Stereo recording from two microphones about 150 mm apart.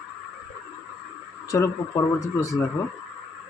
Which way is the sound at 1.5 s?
20° left (ahead or behind).